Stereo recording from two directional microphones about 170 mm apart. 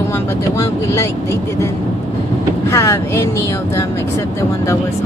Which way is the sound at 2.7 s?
15° left (ahead or behind).